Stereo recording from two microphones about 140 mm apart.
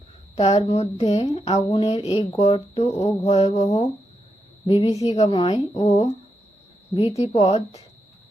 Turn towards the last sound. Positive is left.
turn(degrees=50)  # may be behind; listen again after turning